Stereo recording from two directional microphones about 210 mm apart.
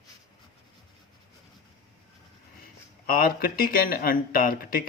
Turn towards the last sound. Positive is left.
turn(degrees=45)  # may be behind; listen again after turning